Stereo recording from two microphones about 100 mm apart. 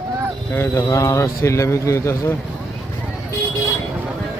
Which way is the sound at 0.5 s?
25° left (ahead or behind).